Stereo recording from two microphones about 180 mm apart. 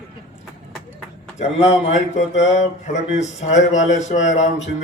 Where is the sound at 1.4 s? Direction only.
35° left (ahead or behind).